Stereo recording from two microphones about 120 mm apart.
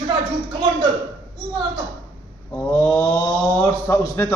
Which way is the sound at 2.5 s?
15° left (ahead or behind).